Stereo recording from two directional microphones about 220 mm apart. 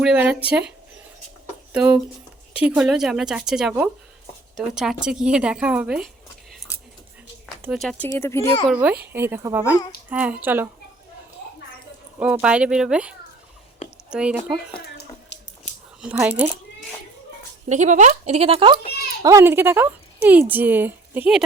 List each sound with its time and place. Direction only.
0.0 s speech: 5° right (ahead or behind)
1.7 s a woman's voice: 5° right (ahead or behind)
7.6 s speech: centre (ahead or behind)
8.7 s speech: 5° right (ahead or behind)
12.2 s a woman's voice: 5° right (ahead or behind)
14.9 s a sound: 55° left (ahead or behind)
16.0 s speech: 5° right (ahead or behind)
17.7 s speech: 30° right (ahead or behind)
19.2 s speech: 15° right (ahead or behind)